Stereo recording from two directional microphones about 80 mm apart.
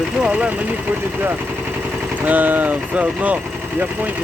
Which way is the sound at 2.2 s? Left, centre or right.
Right.